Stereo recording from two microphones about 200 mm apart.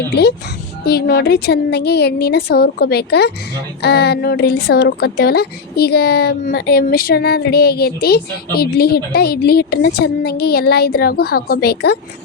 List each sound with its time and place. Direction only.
0.9 s a woman's voice: 55° left (ahead or behind)